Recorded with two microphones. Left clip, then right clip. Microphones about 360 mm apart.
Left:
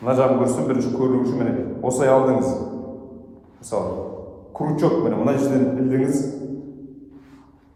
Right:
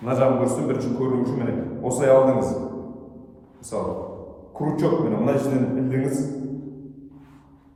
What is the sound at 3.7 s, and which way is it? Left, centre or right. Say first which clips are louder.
A man's voice: left 3 dB; centre.